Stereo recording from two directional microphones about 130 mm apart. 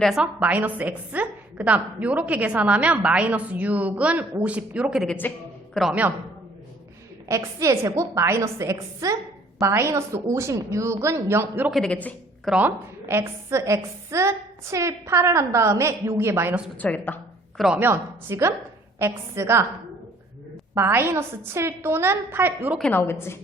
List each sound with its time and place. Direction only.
0.0 s a woman's voice: 5° right (ahead or behind)
5.0 s a woman's voice: 15° left (ahead or behind)
5.9 s a woman's voice: 10° right (ahead or behind)
7.3 s a woman's voice: 25° right (ahead or behind)
11.7 s a woman's voice: 5° left (ahead or behind)
12.5 s a woman's voice: 15° right (ahead or behind)
16.7 s a woman's voice: 15° left (ahead or behind)
17.7 s a woman's voice: 15° right (ahead or behind)
20.7 s a woman's voice: 20° right (ahead or behind)
22.9 s a woman's voice: 15° left (ahead or behind)